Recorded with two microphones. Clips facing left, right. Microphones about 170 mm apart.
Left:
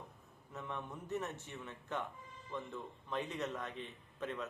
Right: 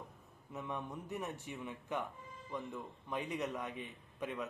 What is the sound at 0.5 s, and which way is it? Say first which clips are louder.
A man's voice: right 2 dB; 15° right (ahead or behind).